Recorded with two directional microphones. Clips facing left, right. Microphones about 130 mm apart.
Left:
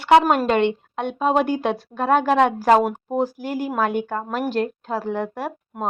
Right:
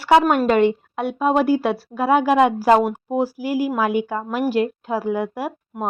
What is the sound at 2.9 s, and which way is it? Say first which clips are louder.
Speech: right 1 dB; 5° right (ahead or behind).